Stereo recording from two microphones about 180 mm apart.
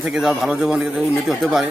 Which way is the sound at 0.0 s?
5° right (ahead or behind).